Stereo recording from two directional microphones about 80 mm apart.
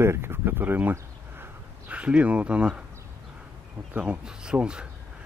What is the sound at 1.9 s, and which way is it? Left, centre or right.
Speech, centre.